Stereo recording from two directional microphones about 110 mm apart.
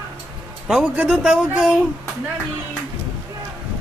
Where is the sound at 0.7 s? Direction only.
Centre (ahead or behind).